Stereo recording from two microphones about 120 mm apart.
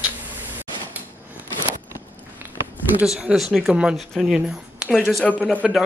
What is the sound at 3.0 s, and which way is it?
Speech, 5° right (ahead or behind).